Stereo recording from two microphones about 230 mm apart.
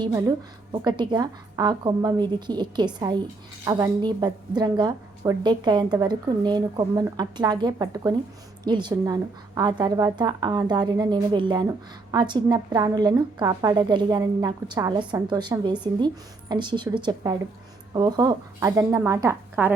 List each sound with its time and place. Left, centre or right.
0.0 s a woman's voice: centre